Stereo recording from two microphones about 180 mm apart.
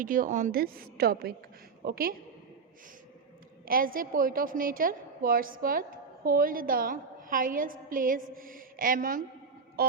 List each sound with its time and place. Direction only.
0.0 s a woman's voice: 50° right (ahead or behind)
3.7 s a woman's voice: 50° right (ahead or behind)